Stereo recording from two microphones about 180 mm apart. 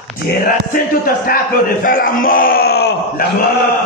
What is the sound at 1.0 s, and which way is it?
A man's voice, 55° left (ahead or behind).